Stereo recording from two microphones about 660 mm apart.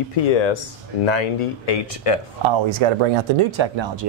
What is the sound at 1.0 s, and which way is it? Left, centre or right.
Speech, left.